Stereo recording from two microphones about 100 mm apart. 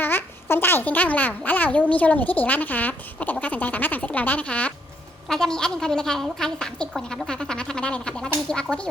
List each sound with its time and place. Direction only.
0.0 s a woman's voice: 20° left (ahead or behind)